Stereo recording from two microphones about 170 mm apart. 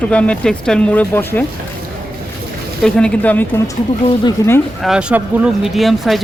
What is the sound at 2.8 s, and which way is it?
Speech, 5° left (ahead or behind).